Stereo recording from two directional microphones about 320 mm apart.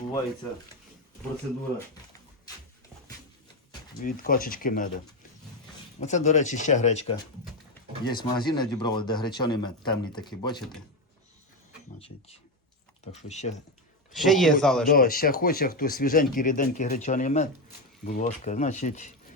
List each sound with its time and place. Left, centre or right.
4.0 s speech: left
6.0 s a man's voice: left
11.9 s speech: centre
14.1 s speech: centre
14.8 s speech: left